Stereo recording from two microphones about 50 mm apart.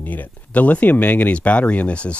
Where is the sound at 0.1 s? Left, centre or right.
Left.